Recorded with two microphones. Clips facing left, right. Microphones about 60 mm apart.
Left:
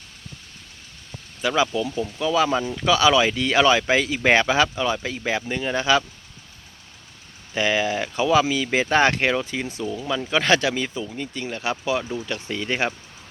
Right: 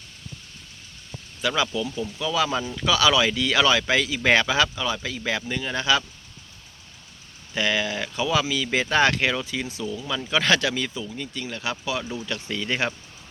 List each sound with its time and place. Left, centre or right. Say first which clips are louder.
1.4 s speech: left 3 dB; left
2.6 s speech: left 3 dB; centre
2.8 s speech: left 2 dB; left
7.5 s speech: left 3 dB; left
10.1 s speech: left 2 dB; left